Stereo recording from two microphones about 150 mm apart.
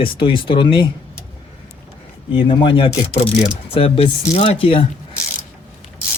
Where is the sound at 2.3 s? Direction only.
35° left (ahead or behind).